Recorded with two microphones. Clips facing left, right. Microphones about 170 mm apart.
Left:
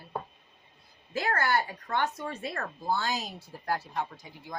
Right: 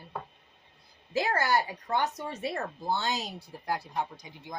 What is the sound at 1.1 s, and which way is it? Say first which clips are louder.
Speech: right 1 dB; 20° right (ahead or behind).